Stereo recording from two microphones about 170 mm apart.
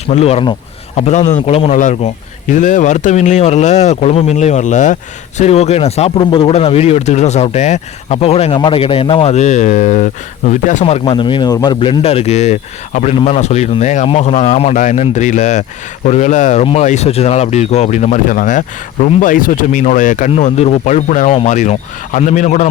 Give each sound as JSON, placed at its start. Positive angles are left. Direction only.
{"t": 0.1, "sound": "speech", "side_deg": 40}